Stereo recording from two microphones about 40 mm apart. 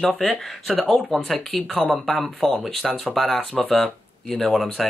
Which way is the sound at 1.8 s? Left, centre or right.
Centre.